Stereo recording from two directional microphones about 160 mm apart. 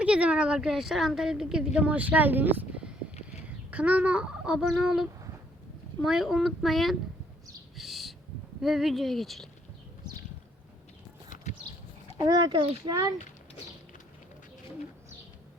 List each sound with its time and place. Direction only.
0.0 s a woman's voice: 5° right (ahead or behind)
6.1 s a woman's voice: centre (ahead or behind)
7.8 s owl: centre (ahead or behind)
8.6 s a woman's voice: centre (ahead or behind)
12.2 s a child's voice: 25° right (ahead or behind)